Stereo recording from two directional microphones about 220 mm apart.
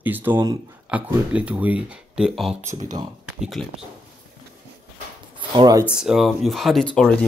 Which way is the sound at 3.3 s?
Centre (ahead or behind).